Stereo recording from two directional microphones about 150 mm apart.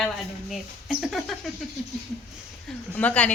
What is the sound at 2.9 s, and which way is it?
Speech, 10° left (ahead or behind).